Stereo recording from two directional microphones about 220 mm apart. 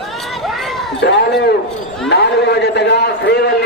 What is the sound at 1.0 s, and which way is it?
A man's voice, 50° left (ahead or behind).